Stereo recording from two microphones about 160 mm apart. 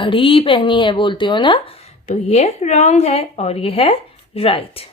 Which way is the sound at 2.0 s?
45° left (ahead or behind).